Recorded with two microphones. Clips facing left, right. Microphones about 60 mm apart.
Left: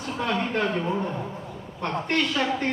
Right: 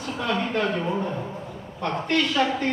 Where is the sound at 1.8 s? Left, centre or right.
Left.